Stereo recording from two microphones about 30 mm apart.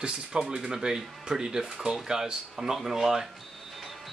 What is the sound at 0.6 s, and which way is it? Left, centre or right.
Speech, centre.